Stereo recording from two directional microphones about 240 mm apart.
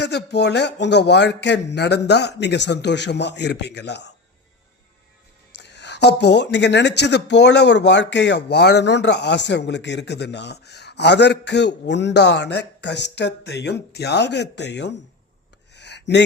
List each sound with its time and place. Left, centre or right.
0.0 s speech: left
5.5 s speech: left
15.7 s a sound: left